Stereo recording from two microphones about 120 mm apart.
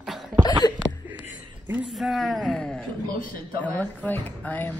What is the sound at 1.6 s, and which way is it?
Speech, 15° right (ahead or behind).